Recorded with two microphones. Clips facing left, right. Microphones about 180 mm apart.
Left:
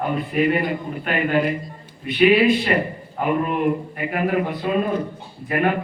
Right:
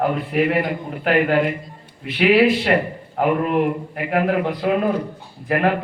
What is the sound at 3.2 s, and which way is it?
Speech, 90° right.